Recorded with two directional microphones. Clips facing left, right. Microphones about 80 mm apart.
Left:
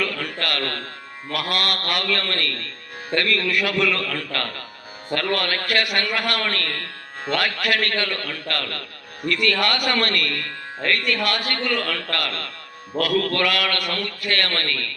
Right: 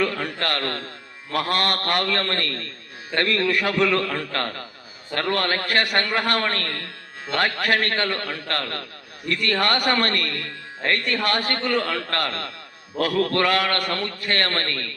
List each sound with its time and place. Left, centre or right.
0.0 s a man's voice: right
6.7 s music: left
7.3 s a man's voice: right